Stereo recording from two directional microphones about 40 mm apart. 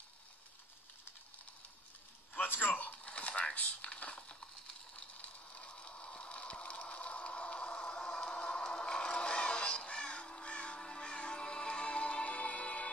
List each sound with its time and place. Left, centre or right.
2.3 s a sound: left
9.9 s music: left
10.8 s music: centre